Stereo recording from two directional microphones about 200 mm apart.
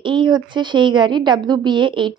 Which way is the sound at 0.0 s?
25° right (ahead or behind).